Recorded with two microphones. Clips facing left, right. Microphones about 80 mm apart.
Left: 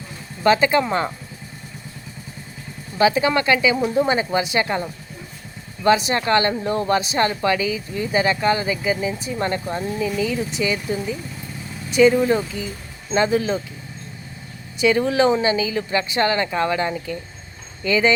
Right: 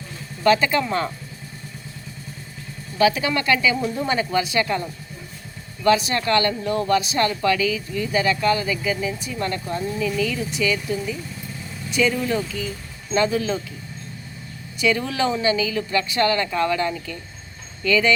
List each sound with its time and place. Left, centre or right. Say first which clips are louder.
0.4 s speech: left 2 dB; left
3.0 s speech: left 2 dB; left
14.8 s speech: left 4 dB; left